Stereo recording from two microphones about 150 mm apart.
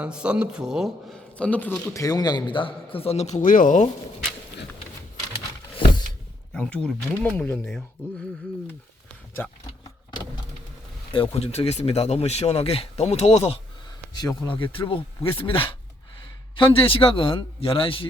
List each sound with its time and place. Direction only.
0.0 s speech: 5° right (ahead or behind); by 2.0 s 10° left (ahead or behind)
2.0 s a man's voice: 25° left (ahead or behind); by 3.8 s 60° left (ahead or behind)
6.5 s speech: 10° left (ahead or behind)
11.1 s speech: 40° left (ahead or behind)
14.1 s a man's voice: 30° left (ahead or behind)